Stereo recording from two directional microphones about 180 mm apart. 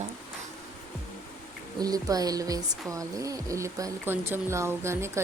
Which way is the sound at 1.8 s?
20° right (ahead or behind).